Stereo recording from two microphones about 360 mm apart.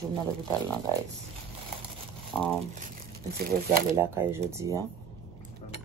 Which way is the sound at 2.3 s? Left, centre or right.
Centre.